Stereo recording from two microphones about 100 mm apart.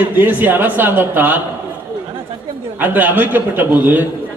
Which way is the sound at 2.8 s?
20° right (ahead or behind).